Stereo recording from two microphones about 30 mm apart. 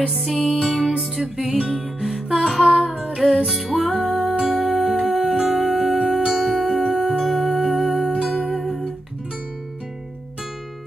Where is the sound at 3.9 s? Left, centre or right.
Right.